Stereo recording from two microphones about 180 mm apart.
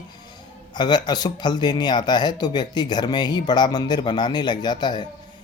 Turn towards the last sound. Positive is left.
turn(degrees=25)  # may be behind; listen again after turning